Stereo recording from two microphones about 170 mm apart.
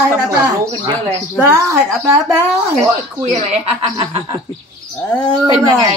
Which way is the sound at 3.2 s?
40° right (ahead or behind).